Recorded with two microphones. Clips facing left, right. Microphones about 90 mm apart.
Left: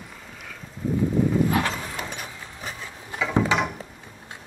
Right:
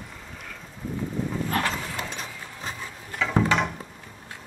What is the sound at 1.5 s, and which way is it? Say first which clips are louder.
Dog: left 2 dB; 15° left (ahead or behind).